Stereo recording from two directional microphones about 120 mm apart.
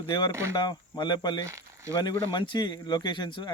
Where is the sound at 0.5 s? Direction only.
40° left (ahead or behind).